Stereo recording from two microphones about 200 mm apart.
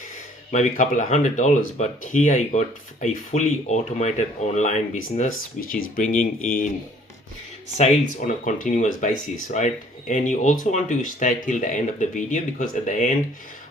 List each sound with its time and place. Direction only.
0.5 s speech: 40° left (ahead or behind)
7.8 s speech: 40° left (ahead or behind)